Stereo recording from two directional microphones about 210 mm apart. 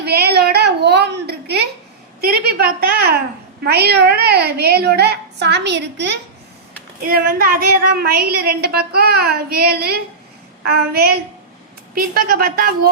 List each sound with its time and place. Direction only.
0.0 s a sound: 50° right (ahead or behind)
2.2 s speech: 50° right (ahead or behind)
3.6 s speech: 50° right (ahead or behind)